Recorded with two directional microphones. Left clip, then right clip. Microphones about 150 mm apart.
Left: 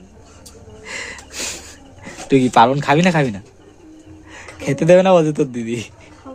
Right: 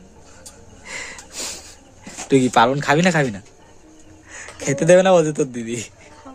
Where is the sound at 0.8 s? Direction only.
5° right (ahead or behind).